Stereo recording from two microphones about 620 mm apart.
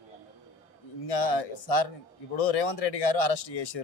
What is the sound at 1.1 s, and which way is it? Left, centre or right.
Speech, left.